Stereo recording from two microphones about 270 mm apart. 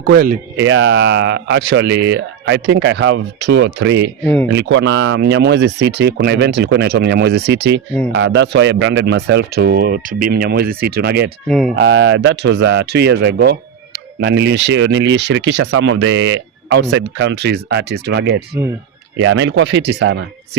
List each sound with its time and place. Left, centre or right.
0.1 s speech: right
0.6 s speech: right
11.4 s speech: centre
11.8 s speech: right
15.6 s speech: right